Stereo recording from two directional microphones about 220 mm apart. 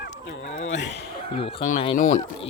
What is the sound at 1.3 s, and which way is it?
Speech, 25° left (ahead or behind).